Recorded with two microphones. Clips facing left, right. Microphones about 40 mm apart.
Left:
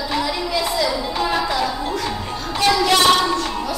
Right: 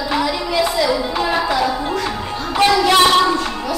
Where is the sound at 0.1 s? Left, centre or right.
Centre.